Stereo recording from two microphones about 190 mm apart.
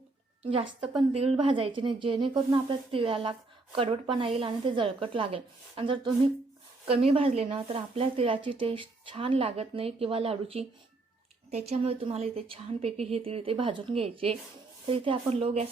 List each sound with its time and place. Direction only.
1.4 s a woman's voice: 30° right (ahead or behind)